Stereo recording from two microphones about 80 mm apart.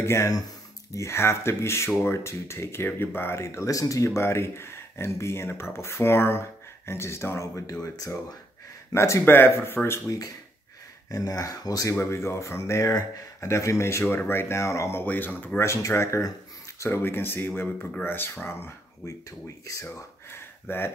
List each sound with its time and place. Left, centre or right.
0.0 s speech: left
9.2 s speech: left
11.1 s speech: left
12.0 s speech: left
15.0 s speech: left
15.6 s speech: left
16.8 s speech: left
19.6 s speech: left
20.0 s a sound: left